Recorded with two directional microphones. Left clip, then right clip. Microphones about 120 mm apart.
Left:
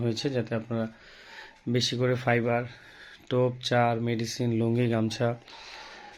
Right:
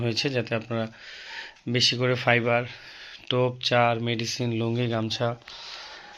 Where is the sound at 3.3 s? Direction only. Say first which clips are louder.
Right 2 dB; 25° left (ahead or behind).